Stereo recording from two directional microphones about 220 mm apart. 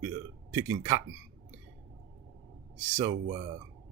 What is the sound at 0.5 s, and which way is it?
Speech, 15° right (ahead or behind).